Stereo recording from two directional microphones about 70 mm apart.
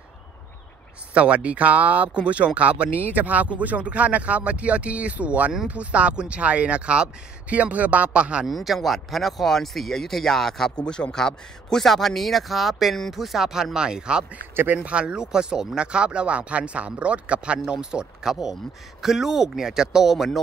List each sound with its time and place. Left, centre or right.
1.1 s speech: centre
8.5 s a man's voice: centre
14.5 s speech: right
14.8 s speech: centre